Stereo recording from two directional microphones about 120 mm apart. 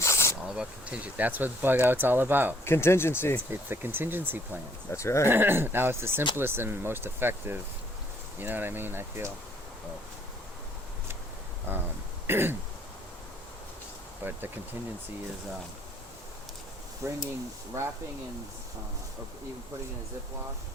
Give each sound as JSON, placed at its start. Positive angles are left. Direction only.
{"t": 0.0, "sound": "snake", "side_deg": 25}
{"t": 0.4, "sound": "speech", "side_deg": -5}
{"t": 2.6, "sound": "speech", "side_deg": 20}
{"t": 3.5, "sound": "speech", "side_deg": -20}
{"t": 4.9, "sound": "speech", "side_deg": 25}
{"t": 5.3, "sound": "speech", "side_deg": -20}
{"t": 11.7, "sound": "speech", "side_deg": -15}
{"t": 14.3, "sound": "speech", "side_deg": -15}
{"t": 17.0, "sound": "speech", "side_deg": -25}